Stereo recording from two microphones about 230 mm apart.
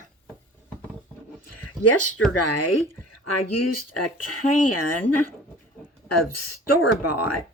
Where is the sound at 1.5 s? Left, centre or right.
Left.